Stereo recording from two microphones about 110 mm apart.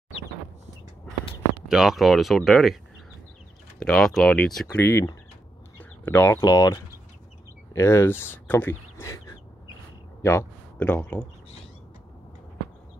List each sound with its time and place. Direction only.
1.7 s speech: 5° right (ahead or behind)
3.8 s speech: 5° left (ahead or behind)
4.7 s speech: 25° left (ahead or behind)
5.8 s a sound: 20° left (ahead or behind)
6.4 s speech: 35° left (ahead or behind); by 9.0 s 15° left (ahead or behind)
9.0 s bird: 35° left (ahead or behind)
10.2 s a sound: 20° left (ahead or behind)
10.9 s speech: 15° left (ahead or behind)